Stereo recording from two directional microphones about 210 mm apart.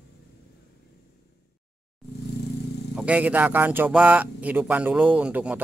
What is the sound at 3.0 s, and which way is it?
Speech, 5° right (ahead or behind).